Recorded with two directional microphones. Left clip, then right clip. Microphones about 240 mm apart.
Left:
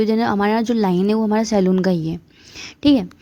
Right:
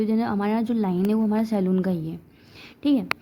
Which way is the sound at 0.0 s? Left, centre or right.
Left.